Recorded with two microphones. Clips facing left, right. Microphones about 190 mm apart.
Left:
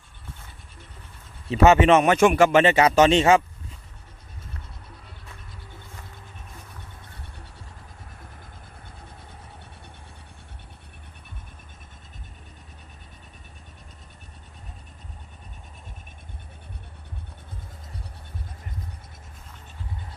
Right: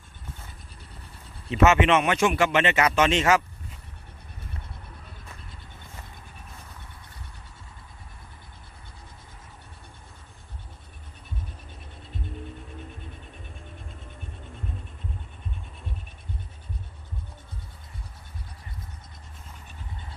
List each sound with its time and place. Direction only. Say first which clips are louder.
1.5 s speech: left 4 dB; 35° left (ahead or behind)